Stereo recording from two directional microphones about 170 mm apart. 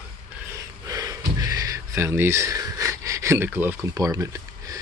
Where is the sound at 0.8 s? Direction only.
20° right (ahead or behind).